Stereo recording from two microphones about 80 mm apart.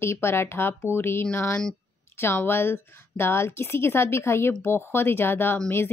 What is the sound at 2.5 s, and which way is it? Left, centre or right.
Speech, left.